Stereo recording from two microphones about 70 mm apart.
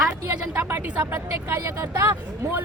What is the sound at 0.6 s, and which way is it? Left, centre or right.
Speech, right.